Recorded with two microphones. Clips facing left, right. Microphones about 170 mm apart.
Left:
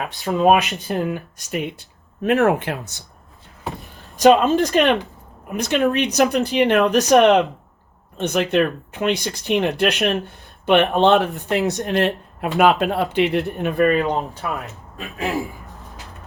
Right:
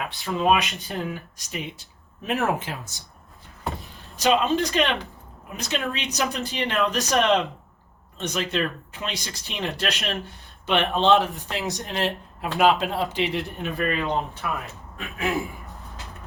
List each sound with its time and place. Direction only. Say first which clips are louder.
0.3 s speech: left 6 dB; 40° left (ahead or behind)
0.5 s speech: left 6 dB; 60° left (ahead or behind)
2.2 s speech: left 8 dB; 70° left (ahead or behind)
4.2 s speech: left 7 dB; 50° left (ahead or behind)
14.9 s throat clearing: left 2 dB; 35° left (ahead or behind)